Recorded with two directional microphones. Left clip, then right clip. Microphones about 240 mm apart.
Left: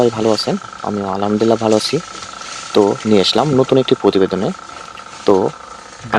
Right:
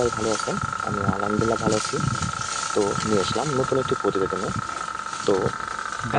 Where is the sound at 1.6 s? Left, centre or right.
Left.